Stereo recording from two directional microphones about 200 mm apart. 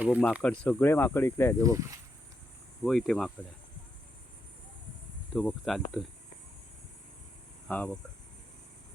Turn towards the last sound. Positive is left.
turn(degrees=5)  # may be behind; listen again after turning